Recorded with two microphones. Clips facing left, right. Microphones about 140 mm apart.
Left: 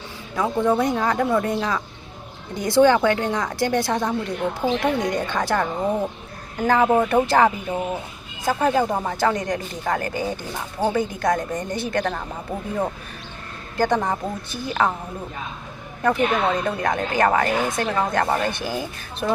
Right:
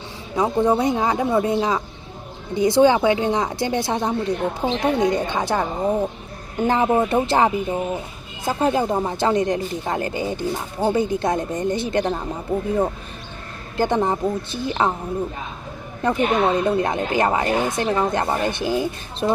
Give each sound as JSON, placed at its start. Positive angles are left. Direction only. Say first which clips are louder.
{"t": 0.3, "sound": "speech", "louder": "right 2 dB", "side_deg": -15}
{"t": 6.7, "sound": "speech", "louder": "left 1 dB", "side_deg": -20}
{"t": 13.7, "sound": "speech", "louder": "right 1 dB", "side_deg": -20}
{"t": 16.0, "sound": "speech", "louder": "right 1 dB", "side_deg": -25}